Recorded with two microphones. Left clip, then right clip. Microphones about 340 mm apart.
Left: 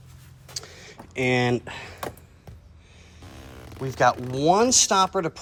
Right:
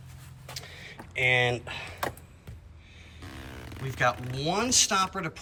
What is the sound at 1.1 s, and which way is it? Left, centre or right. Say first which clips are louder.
Speech: left 1 dB; left.